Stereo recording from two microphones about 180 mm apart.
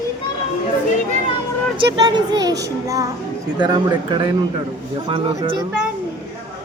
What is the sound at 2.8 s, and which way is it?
Music, 20° right (ahead or behind).